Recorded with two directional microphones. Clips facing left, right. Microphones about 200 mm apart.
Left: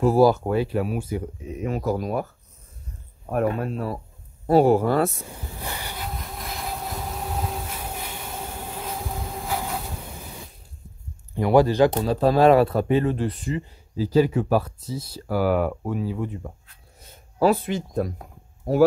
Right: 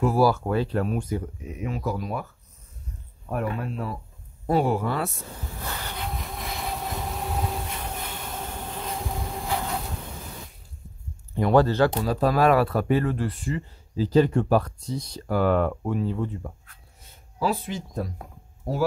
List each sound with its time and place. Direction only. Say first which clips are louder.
0.1 s speech: left 4 dB; 20° left (ahead or behind)
1.7 s speech: left 4 dB; 40° left (ahead or behind)
3.3 s speech: left 5 dB; 40° left (ahead or behind)
5.3 s vehicle: left 1 dB; 15° left (ahead or behind)
11.4 s speech: left 2 dB; 15° left (ahead or behind)
12.0 s speech: left 3 dB; 25° left (ahead or behind); by 16.2 s 5° left (ahead or behind)
17.4 s speech: left 7 dB; 60° left (ahead or behind)